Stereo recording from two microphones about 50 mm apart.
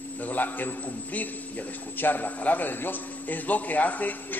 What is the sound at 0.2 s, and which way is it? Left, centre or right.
A man's voice, left.